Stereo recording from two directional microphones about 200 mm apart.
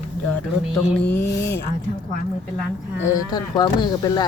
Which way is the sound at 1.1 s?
10° left (ahead or behind).